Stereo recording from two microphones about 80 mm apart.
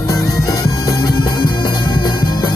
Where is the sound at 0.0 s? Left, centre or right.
Left.